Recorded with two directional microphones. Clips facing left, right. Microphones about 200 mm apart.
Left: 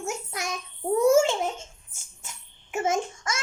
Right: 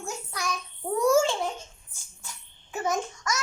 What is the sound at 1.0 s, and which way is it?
Baby laughter, 20° left (ahead or behind).